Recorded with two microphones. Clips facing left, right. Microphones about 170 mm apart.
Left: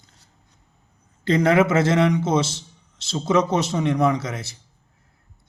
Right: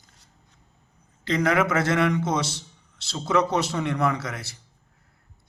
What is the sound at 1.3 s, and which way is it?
A man's voice, 30° left (ahead or behind).